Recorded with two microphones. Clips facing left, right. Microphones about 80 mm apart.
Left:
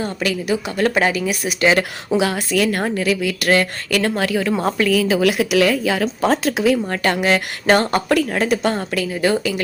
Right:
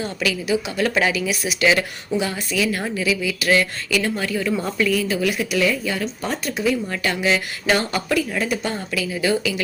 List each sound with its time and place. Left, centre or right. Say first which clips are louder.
0.0 s speech: left 2 dB; left
2.0 s speech: left 6 dB; left
4.6 s a woman's voice: left 4 dB; left
6.9 s speech: left 4 dB; left
9.0 s speech: right 1 dB; left